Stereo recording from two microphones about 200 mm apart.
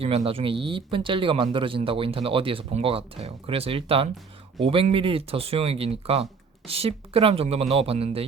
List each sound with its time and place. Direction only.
0.0 s speech: 30° right (ahead or behind)